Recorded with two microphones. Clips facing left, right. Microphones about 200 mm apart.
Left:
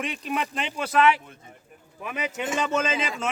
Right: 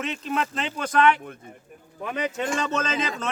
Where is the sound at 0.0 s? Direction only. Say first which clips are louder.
Right 1 dB; 15° left (ahead or behind).